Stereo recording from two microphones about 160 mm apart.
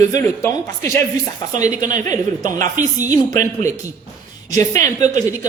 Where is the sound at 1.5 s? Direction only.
50° right (ahead or behind).